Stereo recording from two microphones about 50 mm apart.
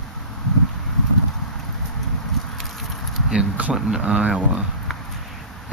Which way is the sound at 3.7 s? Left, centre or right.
Centre.